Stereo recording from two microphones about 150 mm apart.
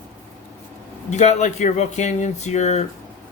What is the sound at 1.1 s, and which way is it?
Speech, 50° left (ahead or behind).